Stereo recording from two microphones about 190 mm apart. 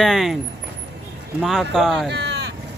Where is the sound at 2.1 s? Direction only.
65° right (ahead or behind).